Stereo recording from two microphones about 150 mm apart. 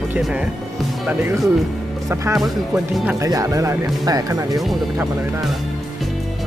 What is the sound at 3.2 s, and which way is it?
Speech, 25° right (ahead or behind).